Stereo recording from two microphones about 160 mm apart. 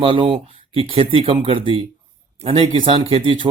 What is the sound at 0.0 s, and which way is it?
Speech, 35° right (ahead or behind).